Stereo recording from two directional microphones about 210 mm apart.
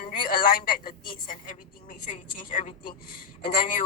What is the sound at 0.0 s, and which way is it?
A woman's voice, 45° left (ahead or behind).